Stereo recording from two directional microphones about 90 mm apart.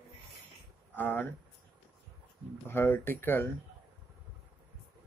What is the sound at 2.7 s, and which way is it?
Speech, 25° left (ahead or behind).